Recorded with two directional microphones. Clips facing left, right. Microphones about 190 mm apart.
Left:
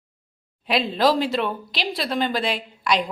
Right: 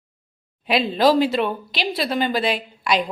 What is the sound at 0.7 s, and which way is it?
Speech, centre (ahead or behind).